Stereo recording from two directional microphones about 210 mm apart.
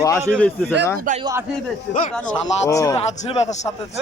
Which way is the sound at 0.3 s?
5° left (ahead or behind).